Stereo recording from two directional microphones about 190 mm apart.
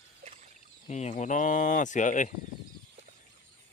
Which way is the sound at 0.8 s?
35° left (ahead or behind).